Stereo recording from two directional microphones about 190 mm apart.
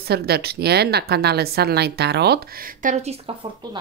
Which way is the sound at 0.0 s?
55° right (ahead or behind).